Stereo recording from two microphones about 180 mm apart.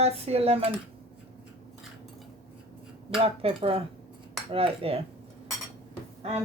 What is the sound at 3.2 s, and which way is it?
Speech, 30° right (ahead or behind).